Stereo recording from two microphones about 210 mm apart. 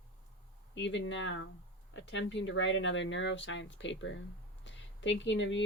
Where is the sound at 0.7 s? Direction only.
60° left (ahead or behind).